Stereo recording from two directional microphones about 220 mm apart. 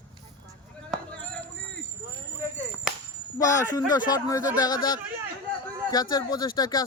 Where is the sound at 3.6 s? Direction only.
15° left (ahead or behind).